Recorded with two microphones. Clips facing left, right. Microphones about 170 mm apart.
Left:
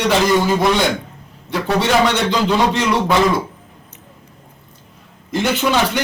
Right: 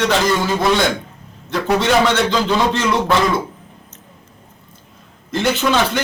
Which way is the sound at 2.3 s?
10° left (ahead or behind).